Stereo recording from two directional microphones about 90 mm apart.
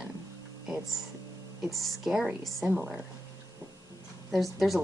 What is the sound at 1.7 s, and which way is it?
A woman's voice, centre (ahead or behind).